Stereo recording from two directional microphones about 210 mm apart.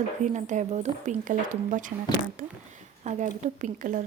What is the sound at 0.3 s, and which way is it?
Speech, 35° right (ahead or behind).